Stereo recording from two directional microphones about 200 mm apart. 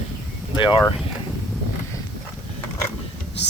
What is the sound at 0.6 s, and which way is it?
Speech, 25° left (ahead or behind).